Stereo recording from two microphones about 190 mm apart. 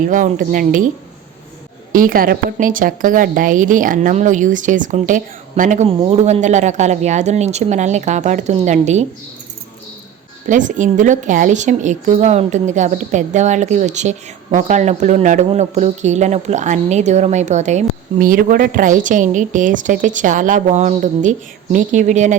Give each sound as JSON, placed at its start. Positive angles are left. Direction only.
{"t": 0.1, "sound": "a woman's voice", "side_deg": -45}
{"t": 1.9, "sound": "a woman's voice", "side_deg": -50}
{"t": 10.5, "sound": "a woman's voice", "side_deg": -40}